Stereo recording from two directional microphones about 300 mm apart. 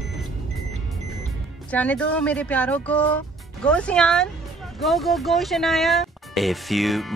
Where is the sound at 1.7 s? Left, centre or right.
Centre.